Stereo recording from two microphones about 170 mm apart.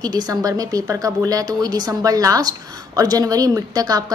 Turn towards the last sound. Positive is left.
turn(degrees=-20)  # may be behind; listen again after turning